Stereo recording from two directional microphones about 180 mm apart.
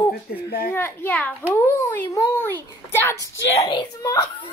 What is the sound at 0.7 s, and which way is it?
A child's voice, 10° left (ahead or behind).